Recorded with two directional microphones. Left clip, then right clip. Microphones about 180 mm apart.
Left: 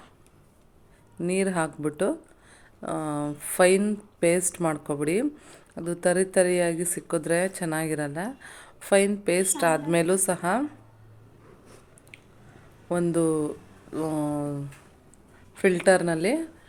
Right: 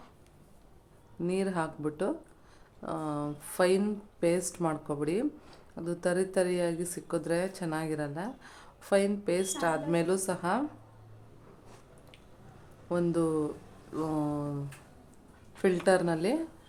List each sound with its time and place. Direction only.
1.2 s a woman's voice: 20° left (ahead or behind)
12.9 s a woman's voice: 20° left (ahead or behind)
15.5 s a woman's voice: 15° left (ahead or behind)